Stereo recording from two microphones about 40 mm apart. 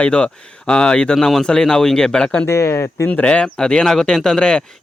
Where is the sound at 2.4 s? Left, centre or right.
Left.